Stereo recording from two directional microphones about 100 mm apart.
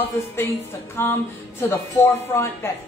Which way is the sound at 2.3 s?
25° left (ahead or behind).